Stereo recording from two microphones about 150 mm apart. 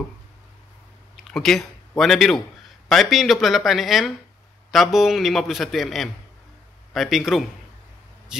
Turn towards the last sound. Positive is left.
turn(degrees=0)  # may be behind; listen again after turning